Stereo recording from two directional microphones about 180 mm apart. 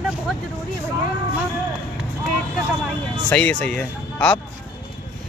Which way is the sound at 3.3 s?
5° left (ahead or behind).